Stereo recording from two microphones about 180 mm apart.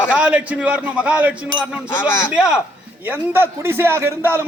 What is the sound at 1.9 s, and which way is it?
Speech, 10° left (ahead or behind).